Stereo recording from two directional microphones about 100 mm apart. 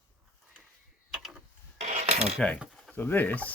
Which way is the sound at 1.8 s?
90° right.